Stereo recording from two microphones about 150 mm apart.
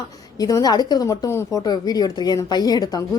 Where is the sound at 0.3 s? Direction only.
25° left (ahead or behind).